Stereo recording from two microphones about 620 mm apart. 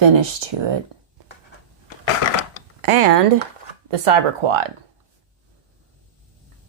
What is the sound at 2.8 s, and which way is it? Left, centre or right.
Speech, right.